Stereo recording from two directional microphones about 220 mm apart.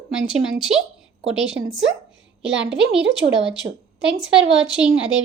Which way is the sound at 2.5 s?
50° right (ahead or behind).